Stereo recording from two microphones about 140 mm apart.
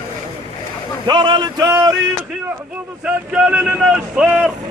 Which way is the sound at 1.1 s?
30° right (ahead or behind).